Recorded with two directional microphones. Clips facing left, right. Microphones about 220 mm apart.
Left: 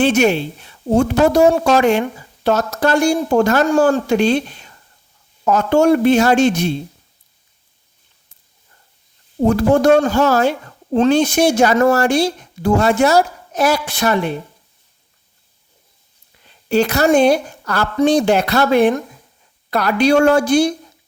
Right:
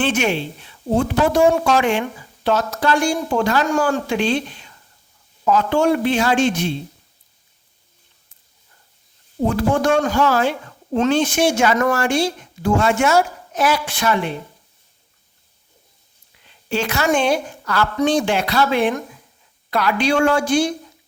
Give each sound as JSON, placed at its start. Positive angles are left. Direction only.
{"t": 0.0, "sound": "a woman's voice", "side_deg": 40}
{"t": 9.4, "sound": "a woman's voice", "side_deg": 40}
{"t": 16.6, "sound": "a woman's voice", "side_deg": 40}